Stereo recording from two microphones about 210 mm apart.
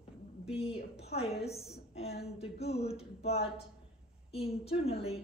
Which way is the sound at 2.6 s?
30° left (ahead or behind).